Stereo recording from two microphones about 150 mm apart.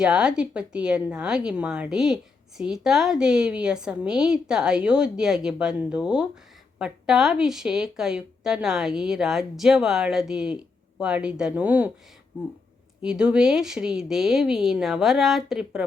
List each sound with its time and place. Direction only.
0.0 s a woman's voice: 5° right (ahead or behind)
13.0 s a woman's voice: 5° right (ahead or behind)